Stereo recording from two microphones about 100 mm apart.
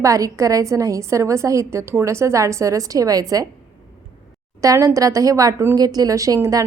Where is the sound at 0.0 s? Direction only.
35° right (ahead or behind).